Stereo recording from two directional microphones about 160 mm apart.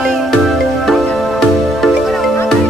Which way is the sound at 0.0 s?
Centre (ahead or behind).